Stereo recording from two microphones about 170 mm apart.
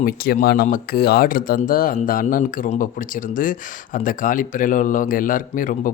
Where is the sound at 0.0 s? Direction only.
60° left (ahead or behind).